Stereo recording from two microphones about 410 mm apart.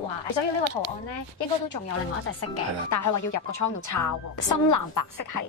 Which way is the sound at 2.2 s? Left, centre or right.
Left.